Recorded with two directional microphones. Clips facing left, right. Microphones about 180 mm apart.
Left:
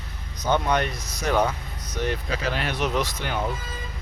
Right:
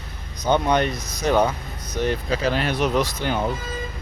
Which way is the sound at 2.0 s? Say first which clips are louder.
Right 5 dB; 35° right (ahead or behind).